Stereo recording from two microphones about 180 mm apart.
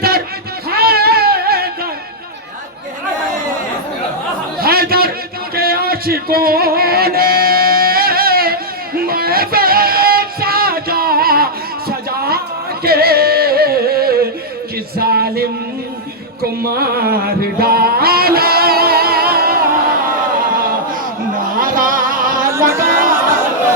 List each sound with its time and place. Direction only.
0.7 s cat: 60° right (ahead or behind)
4.6 s a sound: 55° right (ahead or behind)
5.5 s music: 55° right (ahead or behind)
11.9 s a sound: 60° right (ahead or behind)
12.8 s music: 60° right (ahead or behind)
14.9 s a sound: 60° right (ahead or behind)
16.4 s music: 60° right (ahead or behind)
21.6 s music: 50° right (ahead or behind)
22.8 s chatter: 50° right (ahead or behind)